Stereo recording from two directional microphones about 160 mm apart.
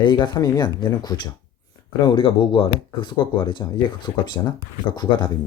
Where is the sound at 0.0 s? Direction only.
30° left (ahead or behind).